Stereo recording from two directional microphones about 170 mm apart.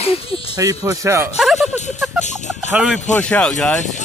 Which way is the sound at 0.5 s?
20° right (ahead or behind).